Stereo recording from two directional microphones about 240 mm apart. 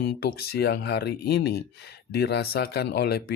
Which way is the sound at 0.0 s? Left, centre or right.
Left.